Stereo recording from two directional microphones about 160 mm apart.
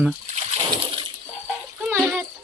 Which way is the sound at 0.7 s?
30° right (ahead or behind).